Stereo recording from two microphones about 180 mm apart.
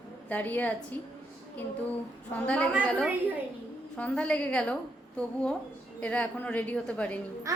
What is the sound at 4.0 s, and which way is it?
A woman's voice, 5° left (ahead or behind).